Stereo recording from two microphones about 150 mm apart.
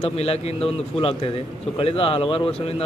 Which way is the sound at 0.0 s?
45° left (ahead or behind).